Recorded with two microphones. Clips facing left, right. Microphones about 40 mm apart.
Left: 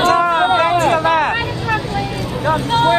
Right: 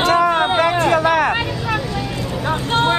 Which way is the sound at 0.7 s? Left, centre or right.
Left.